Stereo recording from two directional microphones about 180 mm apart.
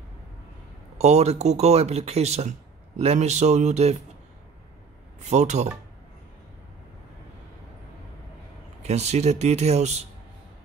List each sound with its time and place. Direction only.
0.9 s speech: 35° right (ahead or behind)
5.2 s speech: 40° right (ahead or behind)
8.8 s speech: 40° right (ahead or behind)